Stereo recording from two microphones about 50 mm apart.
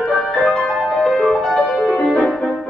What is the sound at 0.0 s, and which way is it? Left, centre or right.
Music, centre.